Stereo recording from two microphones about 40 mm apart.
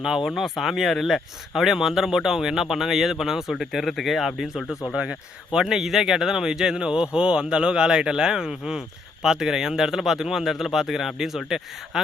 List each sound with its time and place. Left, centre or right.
0.3 s speech: centre
4.9 s speech: centre